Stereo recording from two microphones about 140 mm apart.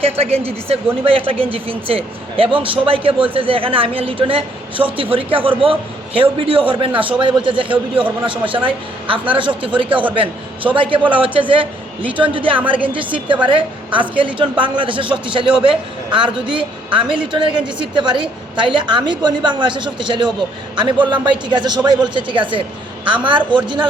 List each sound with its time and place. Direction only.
0.0 s a woman's voice: 45° right (ahead or behind)